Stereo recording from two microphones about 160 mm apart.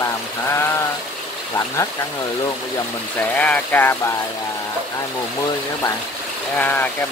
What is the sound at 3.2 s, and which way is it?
Speech, 10° left (ahead or behind).